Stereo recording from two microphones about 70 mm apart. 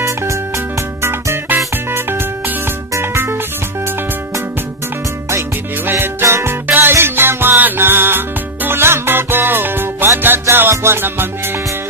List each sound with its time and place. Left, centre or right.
0.0 s music: right
5.8 s music: right